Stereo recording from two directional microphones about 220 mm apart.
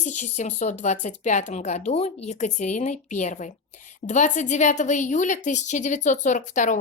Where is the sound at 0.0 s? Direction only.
30° left (ahead or behind).